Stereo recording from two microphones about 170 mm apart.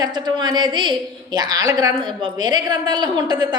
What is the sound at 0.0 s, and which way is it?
A woman's voice, 25° right (ahead or behind).